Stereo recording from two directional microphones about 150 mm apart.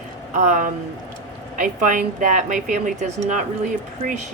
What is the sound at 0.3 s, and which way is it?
Speech, 55° right (ahead or behind).